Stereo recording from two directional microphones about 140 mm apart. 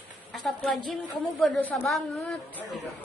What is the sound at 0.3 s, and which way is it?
A woman's voice, centre (ahead or behind).